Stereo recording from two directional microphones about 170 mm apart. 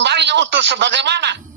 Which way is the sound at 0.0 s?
90° right.